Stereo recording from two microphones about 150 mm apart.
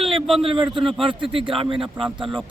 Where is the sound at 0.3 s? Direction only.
35° right (ahead or behind).